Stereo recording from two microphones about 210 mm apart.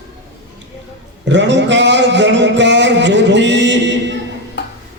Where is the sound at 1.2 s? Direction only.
55° right (ahead or behind).